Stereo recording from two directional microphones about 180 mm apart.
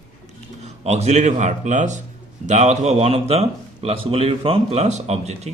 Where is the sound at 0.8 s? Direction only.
35° right (ahead or behind).